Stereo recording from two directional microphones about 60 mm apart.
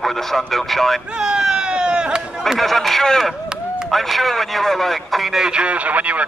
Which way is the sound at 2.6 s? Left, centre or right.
Centre.